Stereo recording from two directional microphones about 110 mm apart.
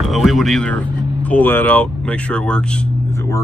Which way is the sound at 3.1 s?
30° left (ahead or behind).